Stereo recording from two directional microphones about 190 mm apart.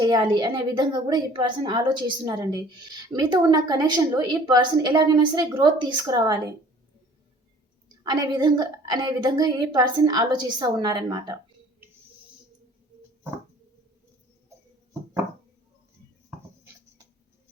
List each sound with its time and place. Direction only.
0.0 s a woman's voice: 20° right (ahead or behind)
8.0 s a woman's voice: 20° right (ahead or behind)